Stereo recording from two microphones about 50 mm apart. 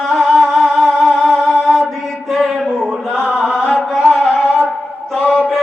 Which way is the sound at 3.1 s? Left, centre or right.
Centre.